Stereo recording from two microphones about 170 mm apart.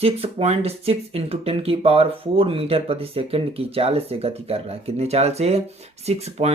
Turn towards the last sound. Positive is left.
turn(degrees=-35)  # may be behind; listen again after turning